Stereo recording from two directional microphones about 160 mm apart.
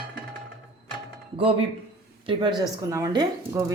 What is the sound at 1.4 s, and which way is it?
A woman's voice, 35° right (ahead or behind).